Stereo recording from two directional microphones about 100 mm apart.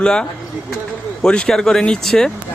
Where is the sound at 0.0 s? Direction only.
10° left (ahead or behind).